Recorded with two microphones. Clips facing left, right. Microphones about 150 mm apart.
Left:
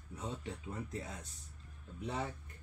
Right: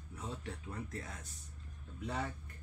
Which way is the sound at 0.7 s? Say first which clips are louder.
Left 2 dB; 20° left (ahead or behind).